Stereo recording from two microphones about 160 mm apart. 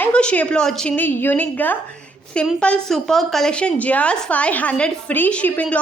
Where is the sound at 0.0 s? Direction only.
5° left (ahead or behind).